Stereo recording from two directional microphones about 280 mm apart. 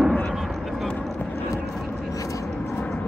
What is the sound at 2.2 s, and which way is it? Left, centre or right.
Vehicle, centre.